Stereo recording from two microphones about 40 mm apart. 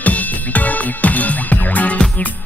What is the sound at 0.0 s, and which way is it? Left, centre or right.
Music, left.